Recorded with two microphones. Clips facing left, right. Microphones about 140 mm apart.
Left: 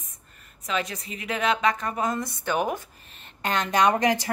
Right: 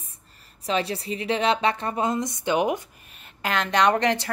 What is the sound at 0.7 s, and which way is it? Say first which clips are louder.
A woman's voice: right 4 dB; 30° right (ahead or behind).